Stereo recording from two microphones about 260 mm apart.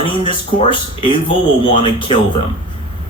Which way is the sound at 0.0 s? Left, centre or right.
Centre.